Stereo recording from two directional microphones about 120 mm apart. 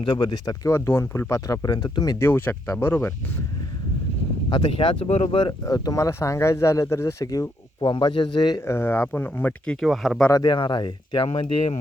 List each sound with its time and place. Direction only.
0.0 s speech: 40° left (ahead or behind)
0.9 s speech: 20° left (ahead or behind)
1.3 s speech: 30° left (ahead or behind)
2.1 s speech: 20° left (ahead or behind)
4.4 s speech: 40° left (ahead or behind)
5.0 s speech: 65° left (ahead or behind)
5.3 s speech: 40° left (ahead or behind)
8.6 s speech: 20° left (ahead or behind)
9.8 s speech: centre (ahead or behind)
10.3 s speech: 35° left (ahead or behind)
11.3 s speech: 60° left (ahead or behind)